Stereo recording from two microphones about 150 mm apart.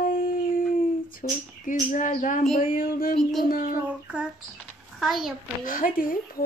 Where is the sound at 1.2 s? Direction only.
65° left (ahead or behind).